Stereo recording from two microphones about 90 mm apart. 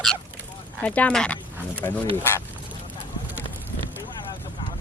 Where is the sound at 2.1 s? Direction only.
25° left (ahead or behind).